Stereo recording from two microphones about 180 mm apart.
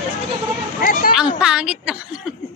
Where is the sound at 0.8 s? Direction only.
50° left (ahead or behind).